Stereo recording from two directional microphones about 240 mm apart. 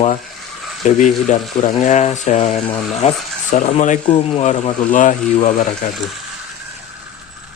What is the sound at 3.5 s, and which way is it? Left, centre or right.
Speech, left.